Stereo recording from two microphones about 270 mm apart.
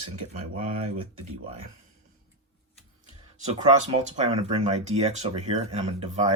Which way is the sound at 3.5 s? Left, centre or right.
Right.